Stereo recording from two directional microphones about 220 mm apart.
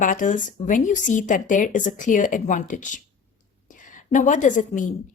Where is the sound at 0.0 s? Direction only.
35° left (ahead or behind).